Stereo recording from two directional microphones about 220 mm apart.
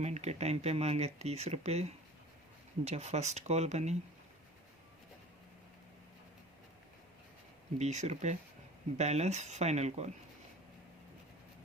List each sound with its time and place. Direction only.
0.0 s speech: 30° right (ahead or behind)
7.8 s speech: 30° right (ahead or behind)